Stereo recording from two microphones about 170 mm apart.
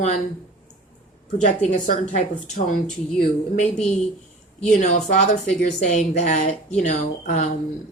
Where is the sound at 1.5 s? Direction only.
45° left (ahead or behind).